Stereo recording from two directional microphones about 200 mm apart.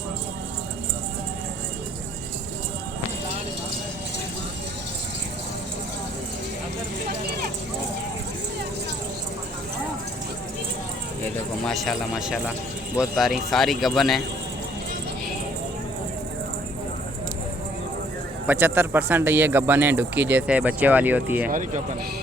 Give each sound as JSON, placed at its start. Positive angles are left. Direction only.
{"t": 11.2, "sound": "speech", "side_deg": 0}
{"t": 18.4, "sound": "speech", "side_deg": -10}
{"t": 21.5, "sound": "speech", "side_deg": -40}